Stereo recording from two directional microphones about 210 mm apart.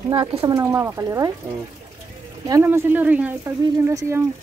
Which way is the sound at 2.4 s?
15° right (ahead or behind).